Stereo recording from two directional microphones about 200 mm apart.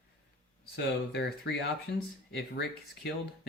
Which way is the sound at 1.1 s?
55° left (ahead or behind).